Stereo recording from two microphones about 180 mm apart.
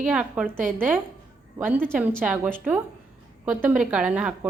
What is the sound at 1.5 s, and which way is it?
A woman's voice, 10° right (ahead or behind).